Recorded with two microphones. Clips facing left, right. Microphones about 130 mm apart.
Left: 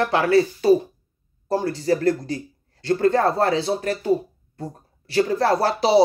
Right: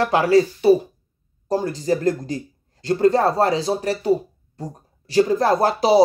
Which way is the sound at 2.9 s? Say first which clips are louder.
Right 2 dB; 35° right (ahead or behind).